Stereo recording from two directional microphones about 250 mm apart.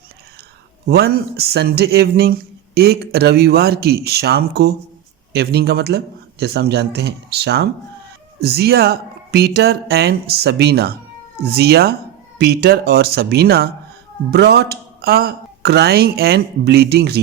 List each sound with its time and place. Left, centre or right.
0.9 s speech: right